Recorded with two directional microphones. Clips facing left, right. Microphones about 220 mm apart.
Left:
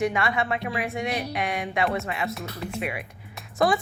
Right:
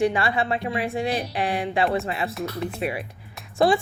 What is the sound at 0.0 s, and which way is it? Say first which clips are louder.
Speech: right 3 dB; 30° right (ahead or behind).